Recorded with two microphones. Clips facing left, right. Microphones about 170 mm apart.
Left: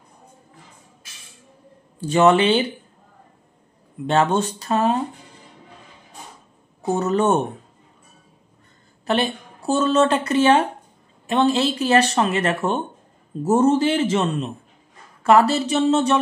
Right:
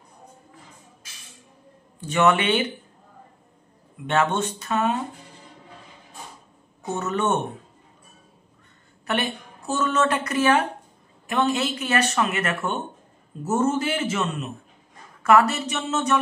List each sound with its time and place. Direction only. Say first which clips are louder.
2.0 s speech: left 5 dB; 30° left (ahead or behind)
4.1 s speech: left 4 dB; 35° left (ahead or behind)
6.8 s speech: left 6 dB; 35° left (ahead or behind)
9.0 s speech: left 5 dB; 30° left (ahead or behind)